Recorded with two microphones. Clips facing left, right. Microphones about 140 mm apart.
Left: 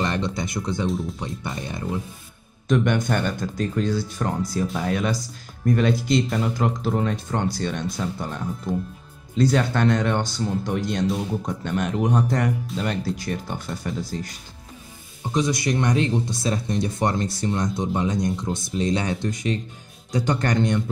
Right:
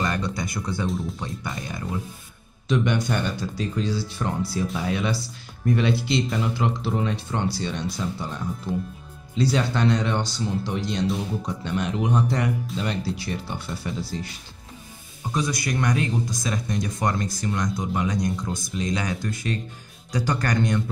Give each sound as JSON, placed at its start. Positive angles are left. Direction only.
{"t": 0.0, "sound": "music", "side_deg": 25}
{"t": 0.4, "sound": "speech", "side_deg": 20}
{"t": 0.8, "sound": "speech", "side_deg": 0}
{"t": 1.2, "sound": "speech", "side_deg": 25}
{"t": 2.7, "sound": "speech", "side_deg": 50}
{"t": 9.4, "sound": "speech", "side_deg": 50}
{"t": 15.3, "sound": "speech", "side_deg": 25}